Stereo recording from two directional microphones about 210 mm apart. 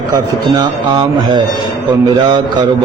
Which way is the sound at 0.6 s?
20° right (ahead or behind).